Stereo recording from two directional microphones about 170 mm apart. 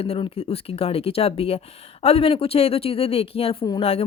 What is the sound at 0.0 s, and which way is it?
Speech, 35° left (ahead or behind).